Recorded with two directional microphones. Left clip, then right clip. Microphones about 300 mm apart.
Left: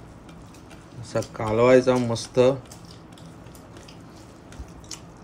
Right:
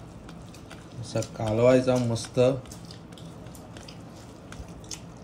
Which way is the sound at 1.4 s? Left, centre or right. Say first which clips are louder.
Left 4 dB; centre.